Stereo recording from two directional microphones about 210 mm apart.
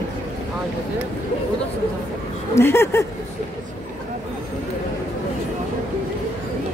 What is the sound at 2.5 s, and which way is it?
Speech, 10° left (ahead or behind).